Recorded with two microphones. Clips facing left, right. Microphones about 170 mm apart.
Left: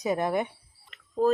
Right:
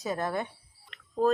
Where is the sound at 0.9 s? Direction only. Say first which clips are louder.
Right 2 dB; 5° left (ahead or behind).